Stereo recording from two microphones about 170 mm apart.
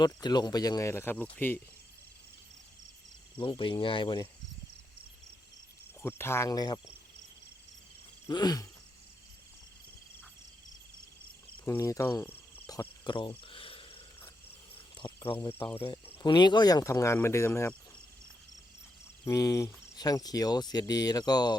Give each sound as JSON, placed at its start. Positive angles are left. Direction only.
{"t": 0.0, "sound": "speech", "side_deg": 25}
{"t": 3.3, "sound": "speech", "side_deg": 30}
{"t": 6.0, "sound": "speech", "side_deg": 15}
{"t": 8.3, "sound": "speech", "side_deg": 25}
{"t": 11.6, "sound": "cricket", "side_deg": 15}
{"t": 13.1, "sound": "speech", "side_deg": 30}
{"t": 13.4, "sound": "a sound", "side_deg": 30}
{"t": 14.9, "sound": "speech", "side_deg": 30}
{"t": 19.2, "sound": "speech", "side_deg": 20}